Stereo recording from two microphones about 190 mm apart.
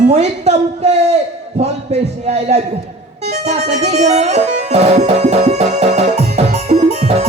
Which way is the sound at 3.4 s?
35° right (ahead or behind).